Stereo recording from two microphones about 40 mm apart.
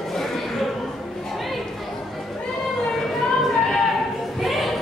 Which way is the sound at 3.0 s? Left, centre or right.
Centre.